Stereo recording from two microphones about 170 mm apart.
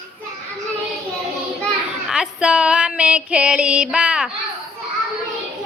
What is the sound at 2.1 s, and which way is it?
Female singing, 5° right (ahead or behind).